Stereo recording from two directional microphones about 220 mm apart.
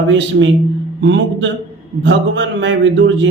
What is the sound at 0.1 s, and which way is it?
A man's voice, 55° right (ahead or behind).